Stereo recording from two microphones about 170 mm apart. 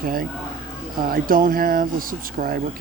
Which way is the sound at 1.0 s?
55° right (ahead or behind).